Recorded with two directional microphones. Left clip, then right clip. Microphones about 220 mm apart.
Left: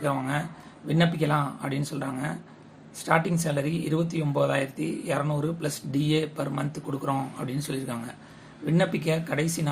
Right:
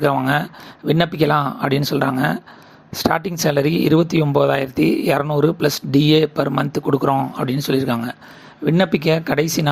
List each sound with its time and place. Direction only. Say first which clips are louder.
0.0 s speech: right 11 dB; 40° right (ahead or behind)